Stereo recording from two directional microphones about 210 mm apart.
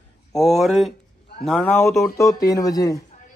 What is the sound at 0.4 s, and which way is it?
A man's voice, centre (ahead or behind).